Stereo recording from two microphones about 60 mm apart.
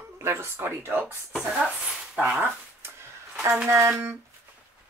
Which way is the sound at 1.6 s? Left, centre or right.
Centre.